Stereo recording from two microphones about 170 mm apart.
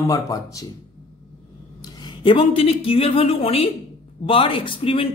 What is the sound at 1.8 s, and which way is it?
Speech, 25° left (ahead or behind).